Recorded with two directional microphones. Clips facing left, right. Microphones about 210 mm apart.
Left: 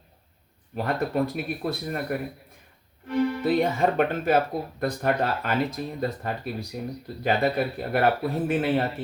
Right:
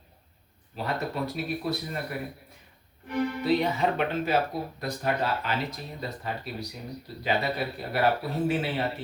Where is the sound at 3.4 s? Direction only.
50° left (ahead or behind).